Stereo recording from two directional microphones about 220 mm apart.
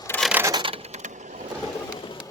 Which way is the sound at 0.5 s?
25° right (ahead or behind).